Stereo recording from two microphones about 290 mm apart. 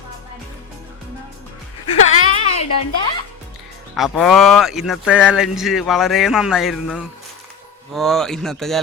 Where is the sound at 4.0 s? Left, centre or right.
Centre.